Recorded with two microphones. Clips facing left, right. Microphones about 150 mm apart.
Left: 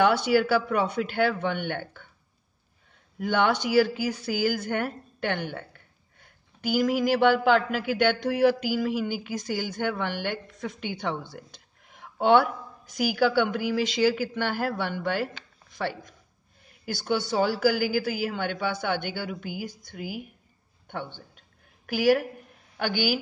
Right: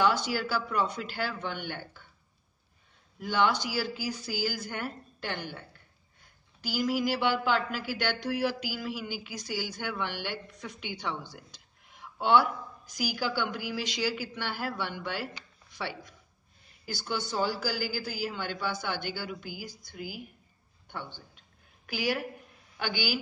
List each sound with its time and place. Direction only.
0.0 s a woman's voice: 60° left (ahead or behind)
3.2 s a woman's voice: 55° left (ahead or behind)
20.9 s a sound: 55° left (ahead or behind)
22.8 s speech: 50° left (ahead or behind)